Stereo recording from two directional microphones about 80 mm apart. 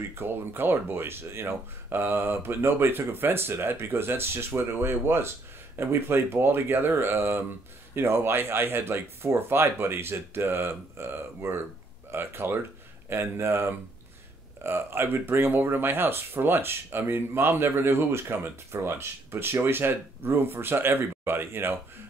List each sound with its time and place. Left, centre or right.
0.1 s speech: right